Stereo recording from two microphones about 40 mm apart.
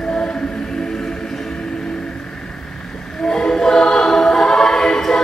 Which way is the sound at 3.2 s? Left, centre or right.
Centre.